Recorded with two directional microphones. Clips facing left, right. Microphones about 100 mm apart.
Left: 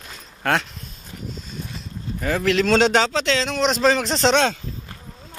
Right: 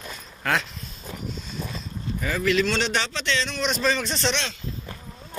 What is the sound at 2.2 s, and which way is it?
A man's voice, 70° left (ahead or behind).